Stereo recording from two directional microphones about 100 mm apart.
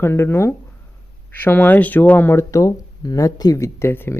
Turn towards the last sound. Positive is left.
turn(degrees=25)  # may be behind; listen again after turning